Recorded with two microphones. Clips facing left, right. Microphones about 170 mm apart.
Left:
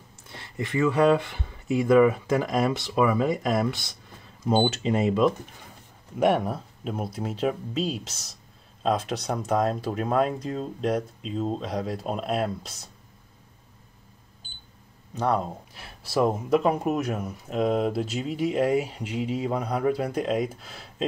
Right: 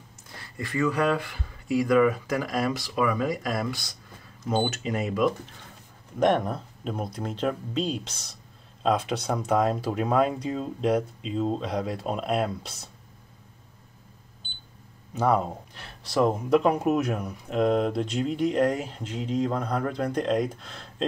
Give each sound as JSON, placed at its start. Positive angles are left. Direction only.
{"t": 0.3, "sound": "speech", "side_deg": 20}
{"t": 6.1, "sound": "speech", "side_deg": 10}
{"t": 15.1, "sound": "speech", "side_deg": -5}
{"t": 15.7, "sound": "speech", "side_deg": 5}